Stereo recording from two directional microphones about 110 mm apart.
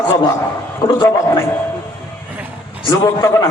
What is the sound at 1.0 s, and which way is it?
Speech, 25° left (ahead or behind).